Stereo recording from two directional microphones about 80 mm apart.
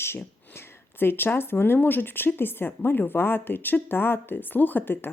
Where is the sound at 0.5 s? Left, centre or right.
Left.